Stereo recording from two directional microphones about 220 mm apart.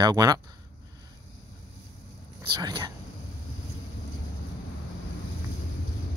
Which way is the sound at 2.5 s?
20° right (ahead or behind).